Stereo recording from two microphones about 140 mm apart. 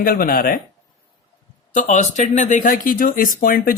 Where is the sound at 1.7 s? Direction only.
60° left (ahead or behind).